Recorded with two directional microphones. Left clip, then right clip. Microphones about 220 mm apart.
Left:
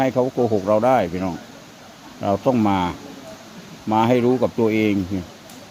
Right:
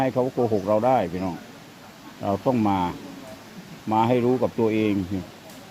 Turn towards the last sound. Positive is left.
turn(degrees=10)  # may be behind; listen again after turning